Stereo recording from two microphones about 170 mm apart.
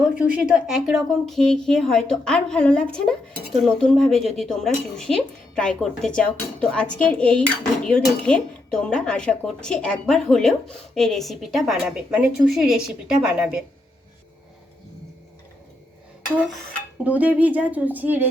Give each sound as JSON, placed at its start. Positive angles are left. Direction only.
{"t": 0.0, "sound": "speech", "side_deg": -5}
{"t": 17.0, "sound": "speech", "side_deg": -10}